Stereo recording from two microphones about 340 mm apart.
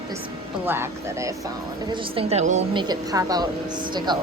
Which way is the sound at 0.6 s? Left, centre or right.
Centre.